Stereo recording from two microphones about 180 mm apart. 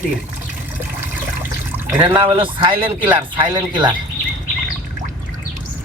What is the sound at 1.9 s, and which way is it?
Speech, 10° right (ahead or behind).